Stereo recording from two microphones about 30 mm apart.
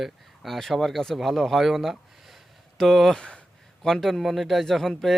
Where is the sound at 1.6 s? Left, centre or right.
Centre.